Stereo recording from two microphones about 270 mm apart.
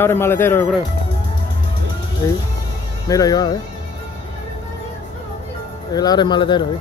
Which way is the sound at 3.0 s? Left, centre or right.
Centre.